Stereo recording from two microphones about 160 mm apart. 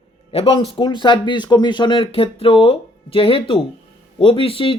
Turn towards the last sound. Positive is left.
turn(degrees=35)  # may be behind; listen again after turning